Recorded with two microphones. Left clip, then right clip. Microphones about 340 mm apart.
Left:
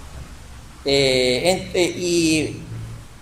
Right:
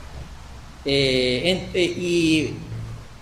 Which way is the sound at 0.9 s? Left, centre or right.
Centre.